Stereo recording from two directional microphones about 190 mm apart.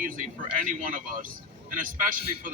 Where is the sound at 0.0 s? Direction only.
45° right (ahead or behind).